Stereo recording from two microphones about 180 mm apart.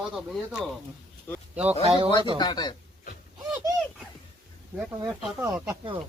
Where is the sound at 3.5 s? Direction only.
20° right (ahead or behind).